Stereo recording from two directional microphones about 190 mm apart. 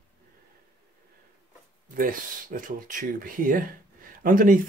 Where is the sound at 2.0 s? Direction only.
45° right (ahead or behind).